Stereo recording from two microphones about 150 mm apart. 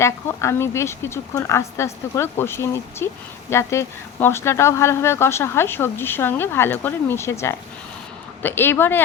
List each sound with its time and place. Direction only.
0.0 s speech: 20° left (ahead or behind)